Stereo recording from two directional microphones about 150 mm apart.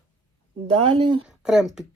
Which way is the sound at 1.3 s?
5° right (ahead or behind).